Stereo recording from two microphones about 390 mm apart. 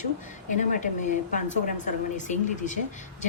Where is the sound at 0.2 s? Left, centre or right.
Centre.